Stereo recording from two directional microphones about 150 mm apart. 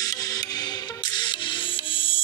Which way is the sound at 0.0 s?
25° left (ahead or behind).